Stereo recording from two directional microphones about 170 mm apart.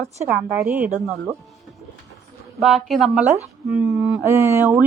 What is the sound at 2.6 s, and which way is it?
A woman's voice, centre (ahead or behind).